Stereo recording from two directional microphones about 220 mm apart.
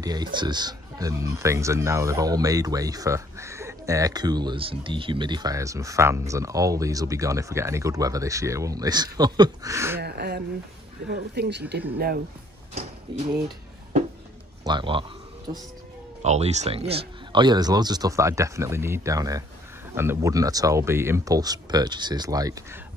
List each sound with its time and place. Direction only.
0.0 s speech: 20° right (ahead or behind)
9.9 s speech: 45° right (ahead or behind)
14.6 s speech: 20° right (ahead or behind)
16.2 s speech: 30° right (ahead or behind)